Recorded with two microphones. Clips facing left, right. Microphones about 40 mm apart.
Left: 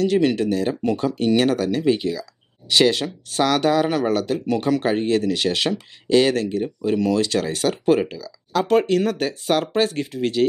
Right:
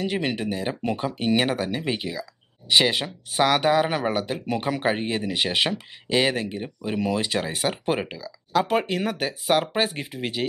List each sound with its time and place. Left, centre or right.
0.0 s speech: centre